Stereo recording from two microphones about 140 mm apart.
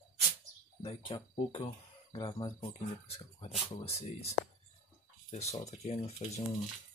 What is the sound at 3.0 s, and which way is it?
Speech, 45° left (ahead or behind).